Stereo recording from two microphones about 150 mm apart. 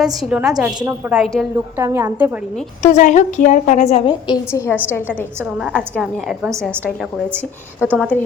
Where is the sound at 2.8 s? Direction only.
50° left (ahead or behind).